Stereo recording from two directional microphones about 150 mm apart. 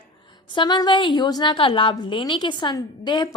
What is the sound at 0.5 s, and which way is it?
A woman's voice, 30° left (ahead or behind).